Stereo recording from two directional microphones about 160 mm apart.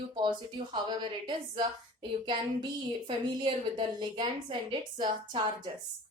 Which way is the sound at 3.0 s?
30° right (ahead or behind).